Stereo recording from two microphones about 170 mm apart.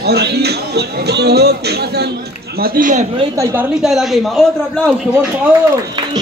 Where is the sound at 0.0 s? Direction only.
75° right (ahead or behind); by 3.1 s 50° right (ahead or behind).